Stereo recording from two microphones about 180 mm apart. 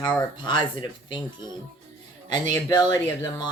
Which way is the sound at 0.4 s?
25° left (ahead or behind).